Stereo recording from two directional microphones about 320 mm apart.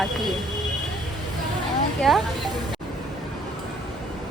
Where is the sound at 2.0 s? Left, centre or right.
Centre.